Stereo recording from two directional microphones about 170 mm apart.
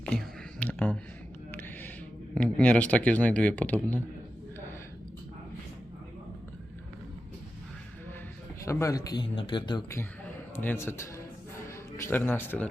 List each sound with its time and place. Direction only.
0.0 s a sound: 5° left (ahead or behind)
1.5 s music: 10° left (ahead or behind)
2.3 s speech: 5° left (ahead or behind)
8.6 s a man's voice: 15° left (ahead or behind)
10.5 s speech: 15° left (ahead or behind)